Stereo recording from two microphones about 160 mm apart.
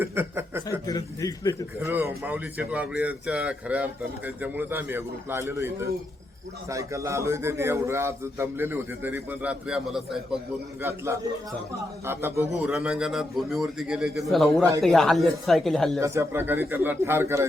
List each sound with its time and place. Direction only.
0.0 s a man's voice: 15° right (ahead or behind)
0.9 s a man's voice: 25° left (ahead or behind)
1.8 s a man's voice: 15° right (ahead or behind)
10.8 s a man's voice: 15° right (ahead or behind)
12.6 s a man's voice: 5° right (ahead or behind)
16.0 s a man's voice: 15° right (ahead or behind)